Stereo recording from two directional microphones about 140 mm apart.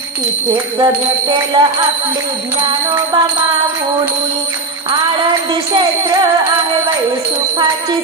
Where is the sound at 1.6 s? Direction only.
35° right (ahead or behind).